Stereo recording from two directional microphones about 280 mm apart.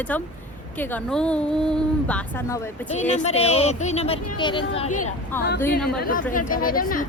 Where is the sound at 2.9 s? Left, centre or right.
Left.